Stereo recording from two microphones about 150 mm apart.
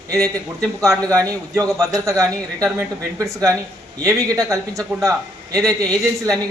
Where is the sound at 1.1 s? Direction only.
20° right (ahead or behind).